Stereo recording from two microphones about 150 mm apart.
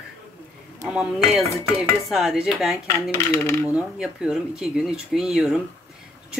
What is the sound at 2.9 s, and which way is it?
Dishes, 20° left (ahead or behind).